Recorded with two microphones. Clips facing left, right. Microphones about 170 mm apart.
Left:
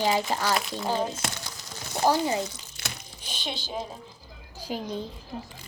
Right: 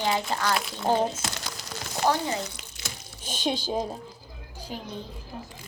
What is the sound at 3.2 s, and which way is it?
Speech, 45° right (ahead or behind).